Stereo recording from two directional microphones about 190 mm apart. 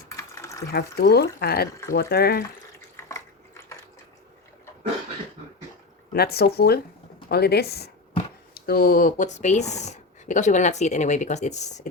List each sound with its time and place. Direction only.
0.2 s a sound: 15° left (ahead or behind)
0.7 s speech: 55° left (ahead or behind)
6.1 s speech: 55° left (ahead or behind); by 11.9 s 40° left (ahead or behind)